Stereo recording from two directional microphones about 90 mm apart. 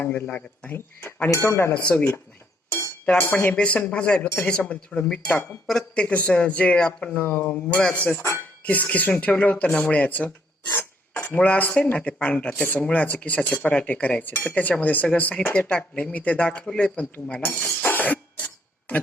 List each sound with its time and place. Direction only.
0.0 s speech: 20° left (ahead or behind)
1.3 s speech: 30° left (ahead or behind)
3.1 s speech: 15° left (ahead or behind)
8.1 s speech: 30° left (ahead or behind)
8.6 s speech: 15° left (ahead or behind)
17.6 s cough: 15° left (ahead or behind)